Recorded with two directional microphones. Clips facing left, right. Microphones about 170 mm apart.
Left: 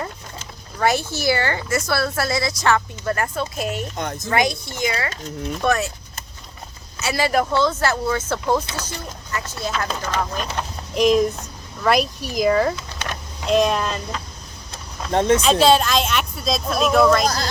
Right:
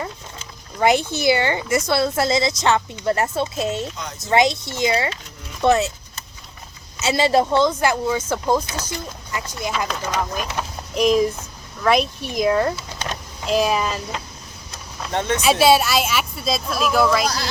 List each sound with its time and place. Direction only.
0.8 s a woman's voice: 20° right (ahead or behind)
3.9 s speech: 55° left (ahead or behind)
4.3 s a woman's voice: 25° right (ahead or behind)
7.0 s a woman's voice: 25° right (ahead or behind); by 14.0 s 5° right (ahead or behind)
15.1 s speech: 30° left (ahead or behind)
15.4 s speech: 10° right (ahead or behind)
17.2 s speech: 45° left (ahead or behind)